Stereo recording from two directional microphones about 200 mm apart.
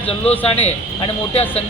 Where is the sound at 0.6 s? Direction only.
30° left (ahead or behind).